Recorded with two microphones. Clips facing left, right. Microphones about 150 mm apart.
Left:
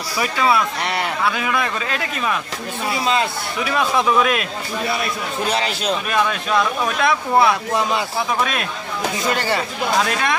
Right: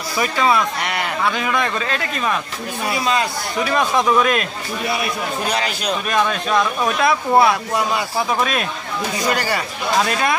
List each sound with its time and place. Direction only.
0.2 s speech: 5° left (ahead or behind)
3.7 s speech: 5° left (ahead or behind)
5.5 s a man's voice: 30° left (ahead or behind)
6.0 s speech: centre (ahead or behind)